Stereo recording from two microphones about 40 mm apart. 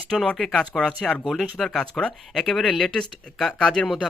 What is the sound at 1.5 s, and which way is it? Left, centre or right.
Speech, centre.